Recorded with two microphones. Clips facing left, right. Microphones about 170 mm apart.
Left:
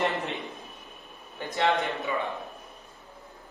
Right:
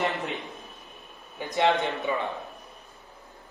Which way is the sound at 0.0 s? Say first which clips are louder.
Even; centre (ahead or behind).